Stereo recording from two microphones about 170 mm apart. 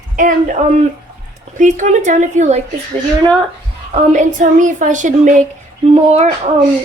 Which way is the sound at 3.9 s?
45° right (ahead or behind).